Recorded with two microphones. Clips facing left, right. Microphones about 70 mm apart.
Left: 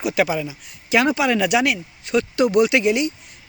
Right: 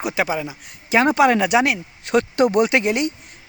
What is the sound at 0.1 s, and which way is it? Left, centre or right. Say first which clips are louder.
Speech: left 3 dB; right.